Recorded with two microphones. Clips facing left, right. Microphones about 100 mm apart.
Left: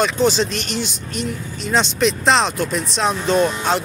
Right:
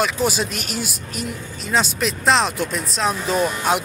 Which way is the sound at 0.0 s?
10° right (ahead or behind).